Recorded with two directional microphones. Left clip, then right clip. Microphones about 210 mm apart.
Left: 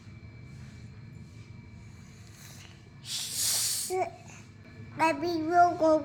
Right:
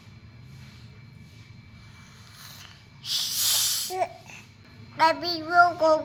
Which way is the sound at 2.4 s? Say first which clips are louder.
Right 5 dB; 15° left (ahead or behind).